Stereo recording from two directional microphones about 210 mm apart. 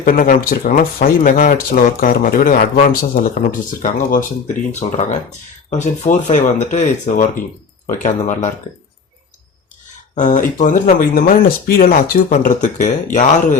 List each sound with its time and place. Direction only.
0.0 s speech: 40° left (ahead or behind)
10.2 s speech: 40° left (ahead or behind)